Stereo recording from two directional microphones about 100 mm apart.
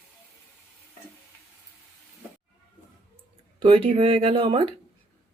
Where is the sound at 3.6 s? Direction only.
65° right (ahead or behind).